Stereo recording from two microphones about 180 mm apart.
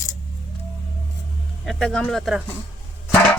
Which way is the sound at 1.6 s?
5° left (ahead or behind).